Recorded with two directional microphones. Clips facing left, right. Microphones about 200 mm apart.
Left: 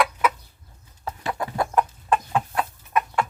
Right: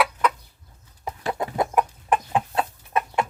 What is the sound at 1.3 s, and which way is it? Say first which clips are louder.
Chicken: right 2 dB; 20° right (ahead or behind).